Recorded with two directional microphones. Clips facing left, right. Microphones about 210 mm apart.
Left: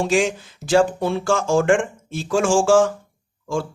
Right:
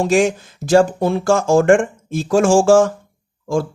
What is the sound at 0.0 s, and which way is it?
Speech, 45° right (ahead or behind).